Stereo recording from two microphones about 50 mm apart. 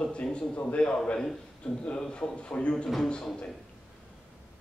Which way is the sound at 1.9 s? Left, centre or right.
Centre.